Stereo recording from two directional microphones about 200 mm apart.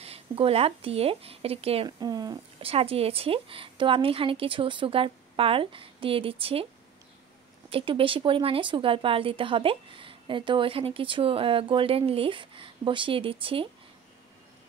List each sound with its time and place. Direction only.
0.0 s speech: 30° right (ahead or behind)
7.7 s speech: 25° right (ahead or behind)